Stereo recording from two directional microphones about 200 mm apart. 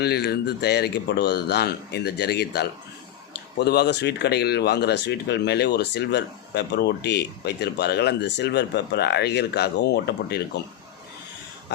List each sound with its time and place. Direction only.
0.0 s speech: 55° left (ahead or behind)